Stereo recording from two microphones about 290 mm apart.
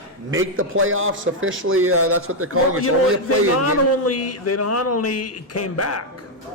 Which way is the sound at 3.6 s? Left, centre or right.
Left.